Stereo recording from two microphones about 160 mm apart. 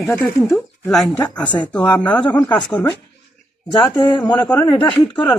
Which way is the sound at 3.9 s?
30° left (ahead or behind).